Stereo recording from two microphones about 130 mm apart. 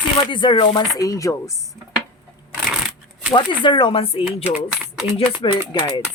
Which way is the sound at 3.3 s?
40° left (ahead or behind).